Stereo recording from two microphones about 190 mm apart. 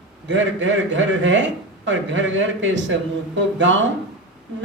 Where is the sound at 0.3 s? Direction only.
75° right (ahead or behind).